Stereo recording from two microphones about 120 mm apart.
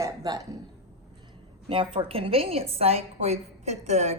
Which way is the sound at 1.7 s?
45° right (ahead or behind).